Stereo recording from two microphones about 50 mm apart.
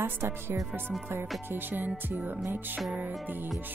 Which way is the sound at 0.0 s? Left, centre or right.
Right.